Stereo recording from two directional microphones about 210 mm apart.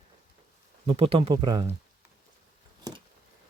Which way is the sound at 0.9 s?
25° right (ahead or behind).